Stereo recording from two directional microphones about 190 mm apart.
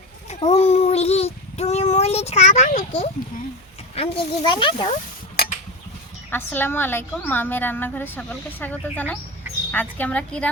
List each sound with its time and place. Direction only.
0.3 s child singing: 35° left (ahead or behind)
3.9 s speech: 30° left (ahead or behind)
6.3 s a woman's voice: 10° left (ahead or behind)